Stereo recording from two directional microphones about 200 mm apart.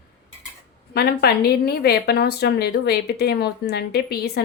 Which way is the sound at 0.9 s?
50° left (ahead or behind).